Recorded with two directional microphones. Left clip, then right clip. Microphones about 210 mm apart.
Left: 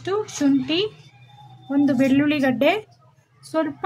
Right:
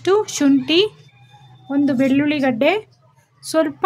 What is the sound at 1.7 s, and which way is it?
A woman's voice, 20° right (ahead or behind).